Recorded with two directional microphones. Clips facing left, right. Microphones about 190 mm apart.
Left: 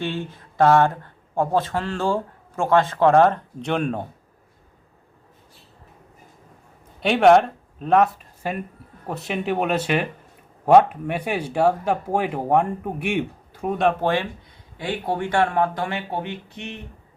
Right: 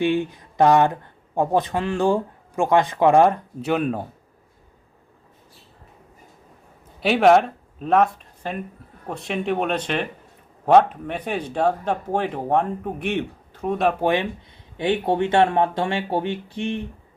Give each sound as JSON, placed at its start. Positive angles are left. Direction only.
{"t": 0.0, "sound": "speech", "side_deg": -15}
{"t": 7.0, "sound": "speech", "side_deg": 0}
{"t": 14.0, "sound": "speech", "side_deg": -15}